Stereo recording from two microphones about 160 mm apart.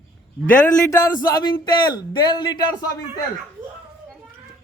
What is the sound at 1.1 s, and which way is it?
A man's voice, 20° left (ahead or behind).